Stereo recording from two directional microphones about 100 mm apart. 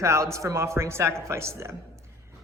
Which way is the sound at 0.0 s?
30° right (ahead or behind).